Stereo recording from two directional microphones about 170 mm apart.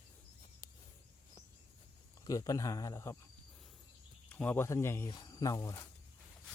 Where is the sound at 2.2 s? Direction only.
20° left (ahead or behind).